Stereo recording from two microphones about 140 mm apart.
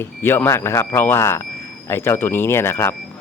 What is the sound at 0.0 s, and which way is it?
Speech, 15° left (ahead or behind).